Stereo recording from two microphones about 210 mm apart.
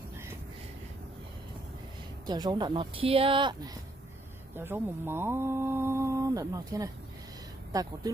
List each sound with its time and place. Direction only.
2.2 s speech: 20° right (ahead or behind)
4.6 s speech: 10° right (ahead or behind)